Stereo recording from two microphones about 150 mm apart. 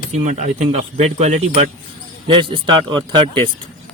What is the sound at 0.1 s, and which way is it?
Speech, 55° right (ahead or behind).